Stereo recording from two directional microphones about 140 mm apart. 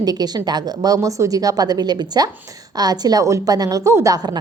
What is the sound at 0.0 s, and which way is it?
A woman's voice, 30° right (ahead or behind).